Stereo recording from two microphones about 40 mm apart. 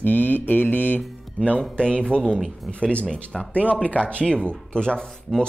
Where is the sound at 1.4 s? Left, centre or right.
Left.